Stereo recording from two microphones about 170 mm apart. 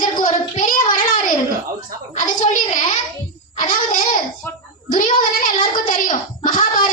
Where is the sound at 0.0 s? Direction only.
50° left (ahead or behind).